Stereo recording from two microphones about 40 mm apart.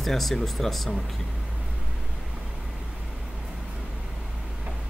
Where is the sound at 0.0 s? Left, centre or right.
Centre.